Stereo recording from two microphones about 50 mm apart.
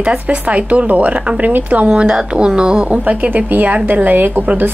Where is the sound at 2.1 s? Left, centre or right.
Centre.